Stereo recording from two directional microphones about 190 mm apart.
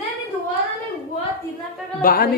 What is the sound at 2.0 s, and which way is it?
Speech, 50° left (ahead or behind).